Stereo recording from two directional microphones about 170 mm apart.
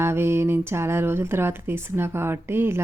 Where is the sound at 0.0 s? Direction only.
15° right (ahead or behind).